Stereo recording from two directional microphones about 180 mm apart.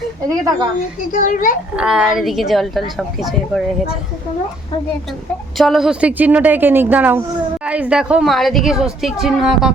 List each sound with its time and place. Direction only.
1.1 s a child's voice: 50° left (ahead or behind)
1.7 s a woman's voice: 5° right (ahead or behind)
5.5 s a woman's voice: centre (ahead or behind)